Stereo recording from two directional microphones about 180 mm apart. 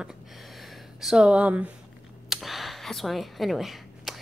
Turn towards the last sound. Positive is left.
turn(degrees=0)  # may be behind; listen again after turning